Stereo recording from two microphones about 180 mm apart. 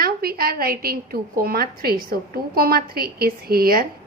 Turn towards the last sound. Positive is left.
turn(degrees=-55)  # may be behind; listen again after turning